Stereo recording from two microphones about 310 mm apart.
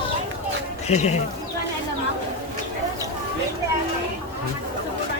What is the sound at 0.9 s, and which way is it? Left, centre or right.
Speech, left.